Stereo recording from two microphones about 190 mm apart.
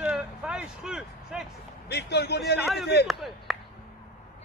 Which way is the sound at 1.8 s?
60° left (ahead or behind).